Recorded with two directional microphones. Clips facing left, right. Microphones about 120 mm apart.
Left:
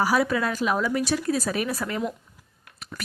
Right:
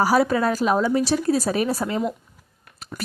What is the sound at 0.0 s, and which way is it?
A woman's voice, 35° right (ahead or behind).